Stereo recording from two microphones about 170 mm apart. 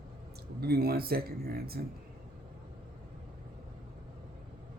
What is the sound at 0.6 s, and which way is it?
Speech, 65° right (ahead or behind).